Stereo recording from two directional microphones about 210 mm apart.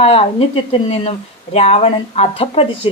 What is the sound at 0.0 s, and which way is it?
A woman's voice, 30° left (ahead or behind).